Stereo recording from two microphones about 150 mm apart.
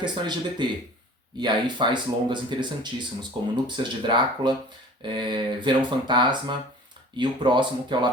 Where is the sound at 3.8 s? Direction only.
30° right (ahead or behind).